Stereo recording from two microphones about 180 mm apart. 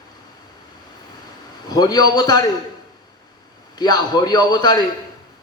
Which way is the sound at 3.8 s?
25° left (ahead or behind).